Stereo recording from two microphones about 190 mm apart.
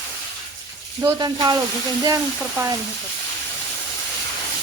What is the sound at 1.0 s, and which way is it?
Speech, 15° right (ahead or behind).